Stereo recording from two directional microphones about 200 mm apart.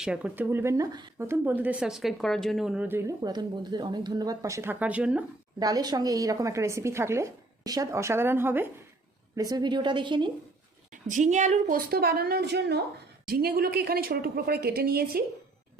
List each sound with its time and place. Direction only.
0.0 s speech: 5° right (ahead or behind)
5.5 s a woman's voice: 20° right (ahead or behind)
11.1 s a woman's voice: 35° right (ahead or behind)
11.9 s a woman's voice: 50° right (ahead or behind)